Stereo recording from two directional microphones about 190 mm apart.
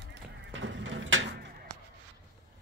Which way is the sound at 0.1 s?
75° right (ahead or behind).